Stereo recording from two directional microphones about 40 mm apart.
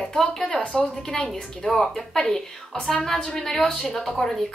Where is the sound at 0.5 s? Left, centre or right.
Left.